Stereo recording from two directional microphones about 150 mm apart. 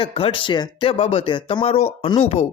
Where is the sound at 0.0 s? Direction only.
40° left (ahead or behind).